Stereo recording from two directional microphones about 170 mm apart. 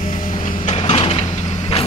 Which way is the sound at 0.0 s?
45° left (ahead or behind).